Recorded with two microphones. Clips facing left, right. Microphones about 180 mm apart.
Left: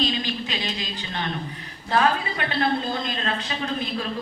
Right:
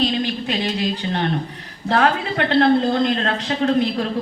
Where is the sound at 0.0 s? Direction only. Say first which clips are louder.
Right 5 dB; 55° right (ahead or behind).